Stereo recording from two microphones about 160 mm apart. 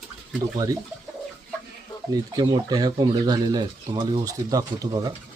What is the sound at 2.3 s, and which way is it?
Speech, 25° right (ahead or behind).